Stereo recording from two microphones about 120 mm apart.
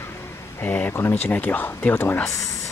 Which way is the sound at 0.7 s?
15° left (ahead or behind).